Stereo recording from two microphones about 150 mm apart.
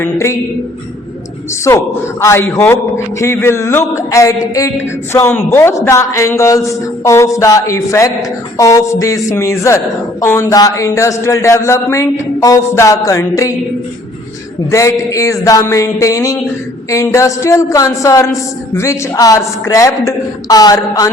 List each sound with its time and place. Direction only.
0.0 s a woman's voice: 20° left (ahead or behind)
2.2 s a woman's voice: 15° left (ahead or behind)
14.7 s a woman's voice: 20° left (ahead or behind)